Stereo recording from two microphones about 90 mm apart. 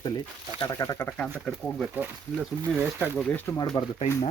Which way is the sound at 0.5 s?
55° left (ahead or behind).